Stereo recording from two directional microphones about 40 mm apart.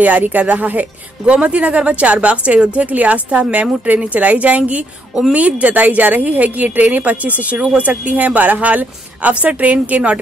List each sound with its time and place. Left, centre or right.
0.0 s speech: right
1.2 s speech: right